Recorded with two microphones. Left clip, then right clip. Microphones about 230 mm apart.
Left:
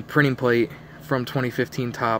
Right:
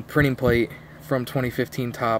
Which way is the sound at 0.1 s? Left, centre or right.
Centre.